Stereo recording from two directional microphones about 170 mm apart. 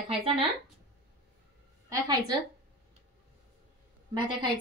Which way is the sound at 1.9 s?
25° right (ahead or behind).